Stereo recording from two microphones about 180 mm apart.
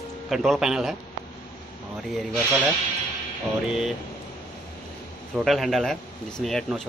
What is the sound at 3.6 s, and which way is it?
Speech, centre (ahead or behind).